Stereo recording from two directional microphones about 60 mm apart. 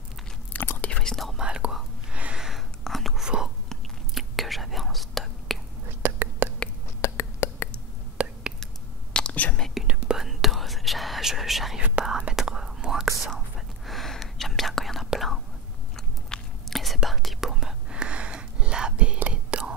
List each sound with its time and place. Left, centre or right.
0.5 s whispering: left
0.9 s whispering: centre
1.3 s whispering: centre
2.3 s a sound: centre
2.8 s whispering: centre
3.2 s whispering: centre
6.0 s whispering: right
7.0 s a sound: left
8.2 s whispering: centre
9.1 s whispering: left
9.8 s whispering: centre
10.1 s whispering: centre
16.3 s chewing: centre
17.0 s whispering: centre; by 19.6 s right